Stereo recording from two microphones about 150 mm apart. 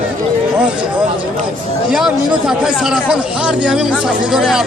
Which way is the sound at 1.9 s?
5° right (ahead or behind).